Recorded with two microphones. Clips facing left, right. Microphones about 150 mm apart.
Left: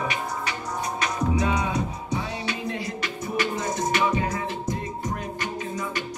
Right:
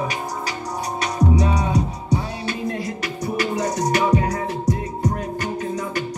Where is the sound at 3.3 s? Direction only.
40° right (ahead or behind).